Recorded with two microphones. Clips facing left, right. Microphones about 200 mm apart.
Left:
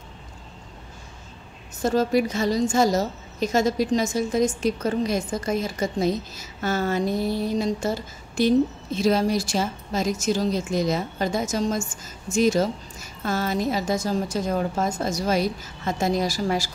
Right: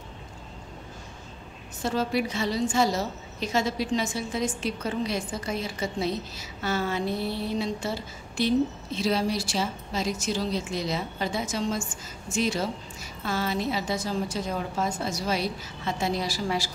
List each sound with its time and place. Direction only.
1.8 s a woman's voice: 45° left (ahead or behind)